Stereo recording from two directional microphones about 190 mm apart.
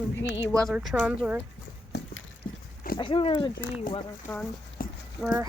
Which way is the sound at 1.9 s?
65° left (ahead or behind).